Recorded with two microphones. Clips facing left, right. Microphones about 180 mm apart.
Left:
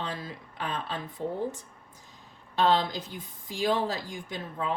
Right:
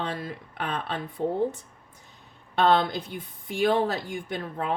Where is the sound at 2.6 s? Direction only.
60° right (ahead or behind).